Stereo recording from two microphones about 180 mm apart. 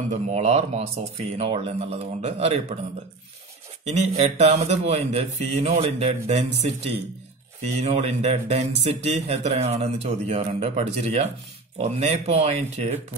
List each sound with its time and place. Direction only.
0.1 s speech: 40° right (ahead or behind)
3.8 s speech: 35° right (ahead or behind)